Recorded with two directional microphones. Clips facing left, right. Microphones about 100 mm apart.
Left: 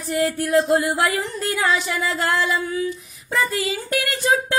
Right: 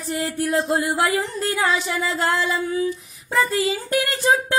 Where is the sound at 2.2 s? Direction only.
25° right (ahead or behind).